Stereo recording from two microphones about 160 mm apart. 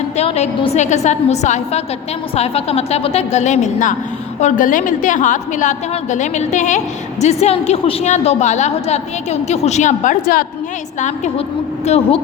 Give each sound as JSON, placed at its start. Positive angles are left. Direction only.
{"t": 0.2, "sound": "a woman's voice", "side_deg": 45}
{"t": 11.0, "sound": "a woman's voice", "side_deg": 45}